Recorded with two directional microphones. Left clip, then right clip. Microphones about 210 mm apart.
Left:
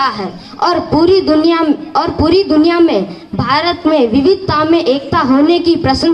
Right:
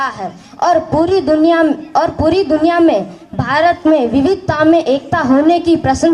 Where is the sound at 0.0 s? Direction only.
40° right (ahead or behind).